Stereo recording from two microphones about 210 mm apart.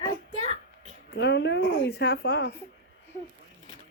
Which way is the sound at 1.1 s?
55° left (ahead or behind).